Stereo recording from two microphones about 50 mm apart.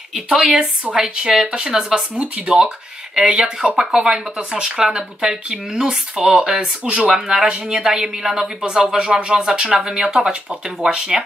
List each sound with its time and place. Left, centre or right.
0.1 s speech: centre
9.8 s speech: centre